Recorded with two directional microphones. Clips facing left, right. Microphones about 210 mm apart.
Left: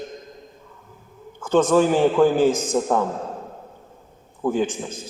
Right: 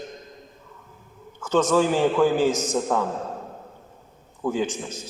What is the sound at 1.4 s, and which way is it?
Speech, 55° left (ahead or behind).